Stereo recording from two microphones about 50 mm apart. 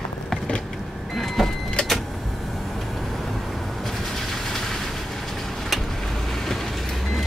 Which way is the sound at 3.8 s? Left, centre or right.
Centre.